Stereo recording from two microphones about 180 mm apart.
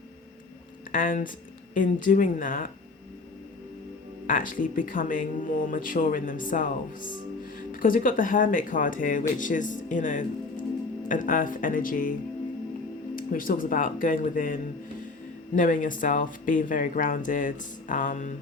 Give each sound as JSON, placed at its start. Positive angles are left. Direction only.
{"t": 0.9, "sound": "speech", "side_deg": 50}
{"t": 4.3, "sound": "speech", "side_deg": 50}
{"t": 7.7, "sound": "speech", "side_deg": 50}
{"t": 13.1, "sound": "speech", "side_deg": 50}